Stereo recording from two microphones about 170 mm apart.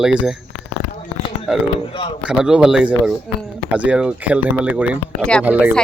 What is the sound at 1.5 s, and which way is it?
Speech, 5° right (ahead or behind).